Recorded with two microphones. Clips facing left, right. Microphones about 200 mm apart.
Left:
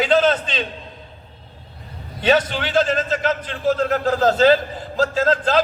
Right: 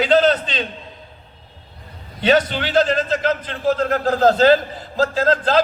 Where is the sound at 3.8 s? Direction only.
45° right (ahead or behind).